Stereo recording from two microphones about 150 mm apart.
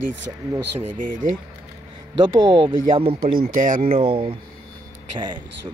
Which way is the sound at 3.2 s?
75° right (ahead or behind).